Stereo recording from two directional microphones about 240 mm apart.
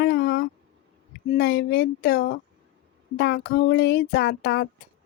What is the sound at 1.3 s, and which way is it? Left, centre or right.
Speech, left.